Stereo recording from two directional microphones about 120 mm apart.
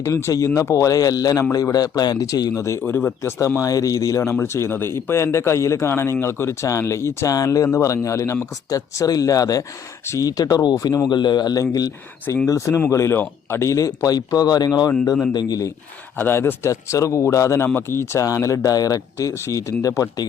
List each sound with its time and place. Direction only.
0.0 s a man's voice: 25° left (ahead or behind)
3.6 s a man's voice: 30° left (ahead or behind)
16.1 s a man's voice: 20° left (ahead or behind)